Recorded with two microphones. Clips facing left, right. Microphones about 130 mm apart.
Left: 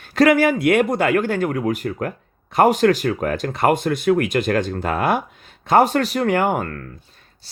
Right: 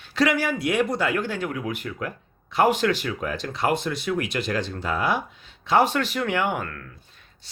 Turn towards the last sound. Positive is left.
turn(degrees=40)  # may be behind; listen again after turning